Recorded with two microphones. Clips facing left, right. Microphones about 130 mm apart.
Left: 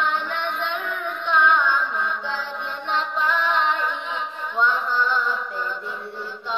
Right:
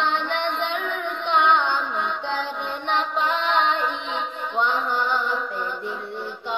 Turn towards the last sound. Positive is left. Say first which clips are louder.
# even
turn(degrees=-20)  # may be behind; listen again after turning